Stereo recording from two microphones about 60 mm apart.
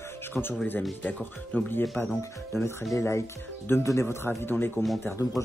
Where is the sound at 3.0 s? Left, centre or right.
Left.